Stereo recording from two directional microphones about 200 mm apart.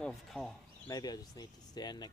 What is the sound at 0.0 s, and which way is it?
Speech, centre (ahead or behind).